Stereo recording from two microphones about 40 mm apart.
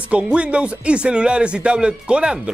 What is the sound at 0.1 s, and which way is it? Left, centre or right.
Speech, right.